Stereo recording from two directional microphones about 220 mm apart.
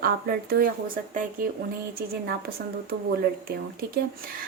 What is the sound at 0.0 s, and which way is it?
Speech, 45° right (ahead or behind).